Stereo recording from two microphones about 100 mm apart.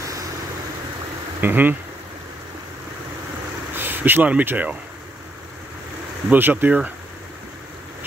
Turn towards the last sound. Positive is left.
turn(degrees=-15)  # may be behind; listen again after turning